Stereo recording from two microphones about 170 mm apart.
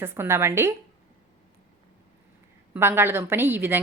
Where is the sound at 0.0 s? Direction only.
15° right (ahead or behind).